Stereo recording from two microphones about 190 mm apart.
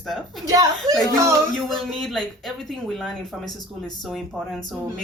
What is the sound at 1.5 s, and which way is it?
Speech, centre (ahead or behind).